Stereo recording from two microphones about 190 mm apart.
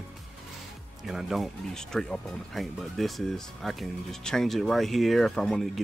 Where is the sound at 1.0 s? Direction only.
Centre (ahead or behind).